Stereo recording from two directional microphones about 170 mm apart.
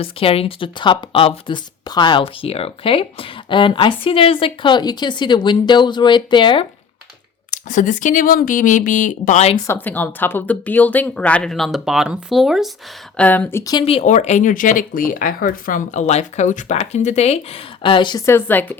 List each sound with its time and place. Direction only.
0.0 s speech: 35° left (ahead or behind)
7.5 s speech: 45° left (ahead or behind)
9.6 s speech: 10° left (ahead or behind)
13.7 s speech: 35° left (ahead or behind)
18.3 s speech: 10° left (ahead or behind)